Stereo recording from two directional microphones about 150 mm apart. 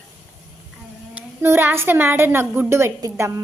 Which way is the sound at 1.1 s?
15° right (ahead or behind).